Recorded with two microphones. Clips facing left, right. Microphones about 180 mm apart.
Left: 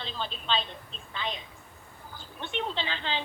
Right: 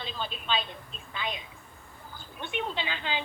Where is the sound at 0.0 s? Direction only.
10° right (ahead or behind).